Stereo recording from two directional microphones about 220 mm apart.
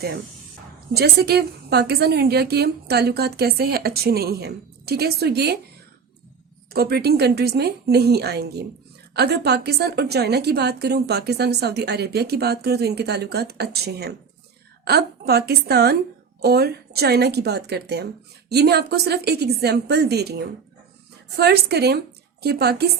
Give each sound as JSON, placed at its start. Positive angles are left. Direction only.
{"t": 0.9, "sound": "a woman's voice", "side_deg": -45}
{"t": 6.7, "sound": "a woman's voice", "side_deg": -45}